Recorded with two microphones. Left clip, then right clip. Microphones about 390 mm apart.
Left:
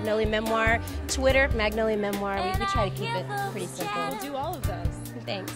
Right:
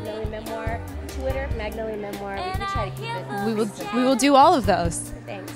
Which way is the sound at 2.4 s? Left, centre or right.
Centre.